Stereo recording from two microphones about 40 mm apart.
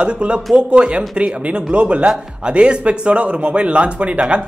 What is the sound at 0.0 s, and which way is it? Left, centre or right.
Speech, right.